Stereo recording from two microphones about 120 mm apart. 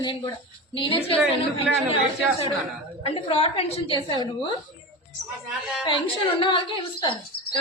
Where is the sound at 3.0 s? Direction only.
50° left (ahead or behind).